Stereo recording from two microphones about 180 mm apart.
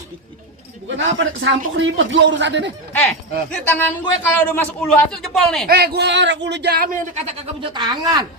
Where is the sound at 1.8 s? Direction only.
90° right.